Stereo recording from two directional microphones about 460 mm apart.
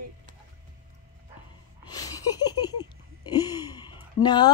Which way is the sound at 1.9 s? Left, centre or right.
Centre.